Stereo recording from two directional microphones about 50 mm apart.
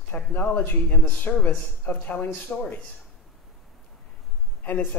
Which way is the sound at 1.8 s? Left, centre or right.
Left.